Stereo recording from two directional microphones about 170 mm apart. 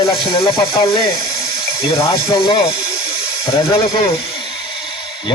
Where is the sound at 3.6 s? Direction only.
30° left (ahead or behind).